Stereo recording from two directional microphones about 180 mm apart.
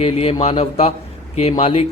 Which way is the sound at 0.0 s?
35° left (ahead or behind).